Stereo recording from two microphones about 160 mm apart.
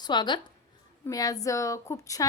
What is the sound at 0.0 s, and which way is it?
A woman's voice, 30° left (ahead or behind).